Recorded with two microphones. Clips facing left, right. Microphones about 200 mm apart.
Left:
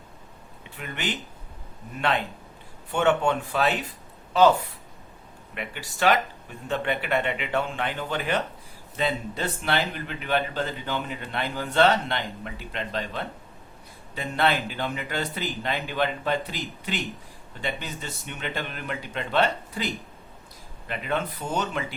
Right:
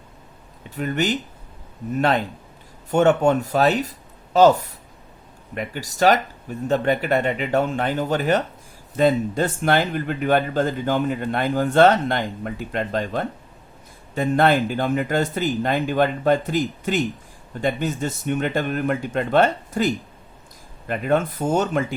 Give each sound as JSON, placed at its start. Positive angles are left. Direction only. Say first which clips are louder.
{"t": 0.6, "sound": "speech", "louder": "right 10 dB", "side_deg": -40}
{"t": 5.5, "sound": "speech", "louder": "right 7 dB", "side_deg": -40}